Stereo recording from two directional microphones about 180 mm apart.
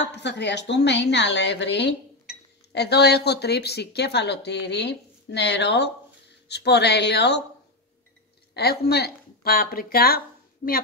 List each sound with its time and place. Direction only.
0.1 s a woman's voice: 70° left (ahead or behind)
8.5 s a woman's voice: 60° left (ahead or behind)